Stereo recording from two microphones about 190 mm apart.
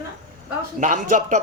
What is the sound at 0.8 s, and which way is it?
Speech, 40° right (ahead or behind).